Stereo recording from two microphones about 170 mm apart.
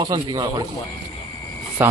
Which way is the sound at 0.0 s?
25° right (ahead or behind).